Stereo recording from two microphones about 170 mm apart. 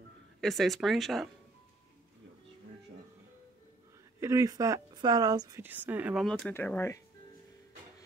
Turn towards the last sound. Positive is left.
turn(degrees=15)  # may be behind; listen again after turning